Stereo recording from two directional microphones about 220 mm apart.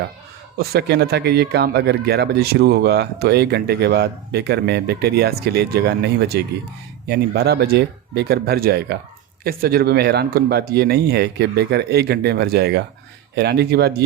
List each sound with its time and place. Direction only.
0.5 s speech: 45° right (ahead or behind)